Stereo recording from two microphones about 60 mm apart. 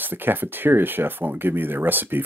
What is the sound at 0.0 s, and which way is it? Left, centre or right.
Speech, right.